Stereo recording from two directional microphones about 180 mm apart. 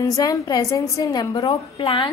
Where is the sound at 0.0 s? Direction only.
20° left (ahead or behind).